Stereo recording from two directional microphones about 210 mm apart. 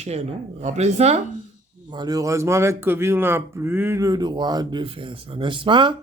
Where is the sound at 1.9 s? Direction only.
20° right (ahead or behind).